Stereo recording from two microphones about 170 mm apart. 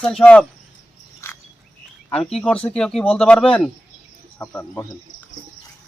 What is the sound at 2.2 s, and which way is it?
Speech, 5° left (ahead or behind).